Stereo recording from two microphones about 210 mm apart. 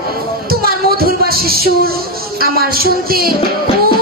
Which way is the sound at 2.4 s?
45° right (ahead or behind).